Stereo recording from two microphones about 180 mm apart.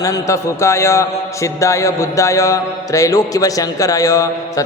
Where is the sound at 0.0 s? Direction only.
20° left (ahead or behind).